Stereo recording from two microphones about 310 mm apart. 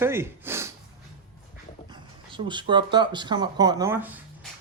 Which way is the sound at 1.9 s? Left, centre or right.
Centre.